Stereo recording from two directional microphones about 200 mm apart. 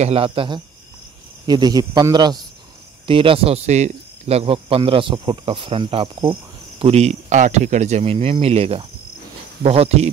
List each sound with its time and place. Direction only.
0.0 s speech: 30° right (ahead or behind)